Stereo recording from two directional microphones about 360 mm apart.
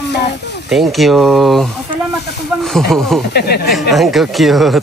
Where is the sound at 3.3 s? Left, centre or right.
Left.